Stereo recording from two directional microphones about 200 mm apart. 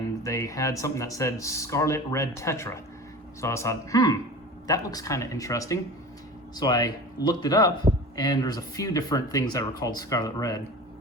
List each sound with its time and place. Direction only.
0.3 s speech: 15° left (ahead or behind)